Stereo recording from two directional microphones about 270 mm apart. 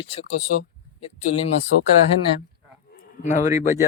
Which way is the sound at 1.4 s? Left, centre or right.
Left.